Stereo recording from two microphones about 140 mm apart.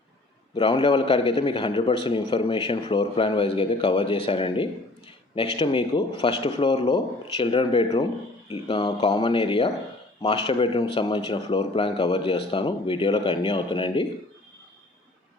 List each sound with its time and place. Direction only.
0.5 s speech: 35° left (ahead or behind)